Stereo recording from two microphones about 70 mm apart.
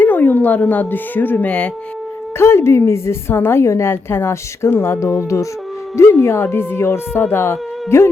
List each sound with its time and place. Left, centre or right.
0.0 s speech: left
2.4 s a woman's voice: left